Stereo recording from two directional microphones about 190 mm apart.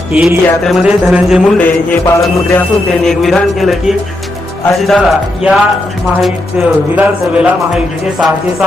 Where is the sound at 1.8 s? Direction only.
15° left (ahead or behind).